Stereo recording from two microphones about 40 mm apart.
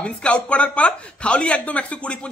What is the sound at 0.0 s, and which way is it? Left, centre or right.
Speech, left.